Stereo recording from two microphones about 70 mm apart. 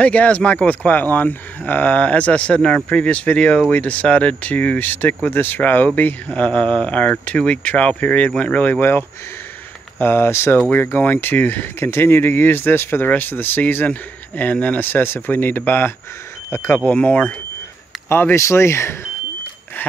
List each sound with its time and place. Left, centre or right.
0.0 s speech: left
16.9 s speech: centre
18.0 s speech: left
19.8 s a sound: left